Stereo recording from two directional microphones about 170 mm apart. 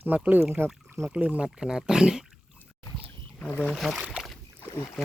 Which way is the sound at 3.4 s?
10° left (ahead or behind).